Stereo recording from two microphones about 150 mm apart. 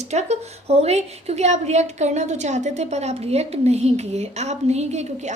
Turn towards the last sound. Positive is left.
turn(degrees=-50)  # may be behind; listen again after turning